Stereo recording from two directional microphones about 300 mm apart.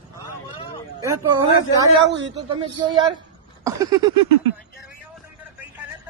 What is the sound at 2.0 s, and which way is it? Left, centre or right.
Speech, right.